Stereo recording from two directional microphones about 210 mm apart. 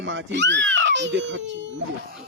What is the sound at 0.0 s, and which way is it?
A child's voice, 60° right (ahead or behind).